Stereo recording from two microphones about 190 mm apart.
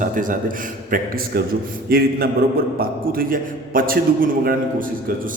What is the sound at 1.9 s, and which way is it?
A man's voice, 50° right (ahead or behind).